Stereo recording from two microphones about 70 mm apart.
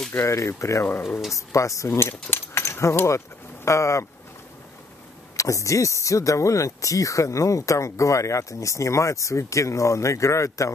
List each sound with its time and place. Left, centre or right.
0.1 s speech: left
1.9 s speech: left
5.3 s speech: left